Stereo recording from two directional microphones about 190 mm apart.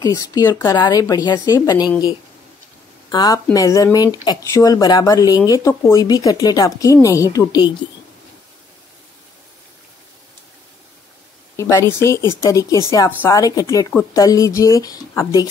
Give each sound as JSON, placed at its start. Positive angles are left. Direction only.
{"t": 0.0, "sound": "speech", "side_deg": 20}
{"t": 3.1, "sound": "speech", "side_deg": 20}
{"t": 11.5, "sound": "speech", "side_deg": 15}